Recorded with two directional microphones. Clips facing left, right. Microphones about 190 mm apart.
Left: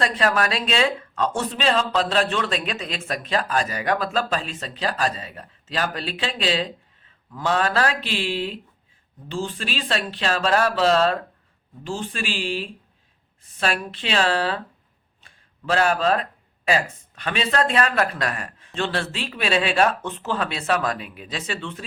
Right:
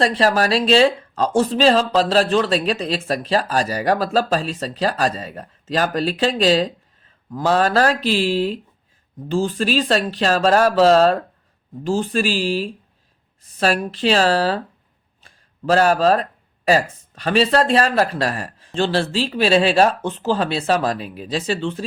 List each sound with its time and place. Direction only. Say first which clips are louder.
0.0 s speech: right 5 dB; 35° right (ahead or behind)
15.2 s a sound: right 9 dB; 40° right (ahead or behind)
16.6 s speech: right 5 dB; 35° right (ahead or behind)